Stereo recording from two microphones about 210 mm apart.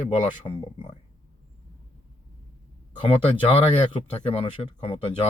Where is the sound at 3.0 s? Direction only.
25° left (ahead or behind).